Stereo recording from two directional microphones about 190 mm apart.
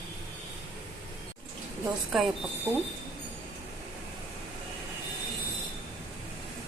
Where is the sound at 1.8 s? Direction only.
Centre (ahead or behind).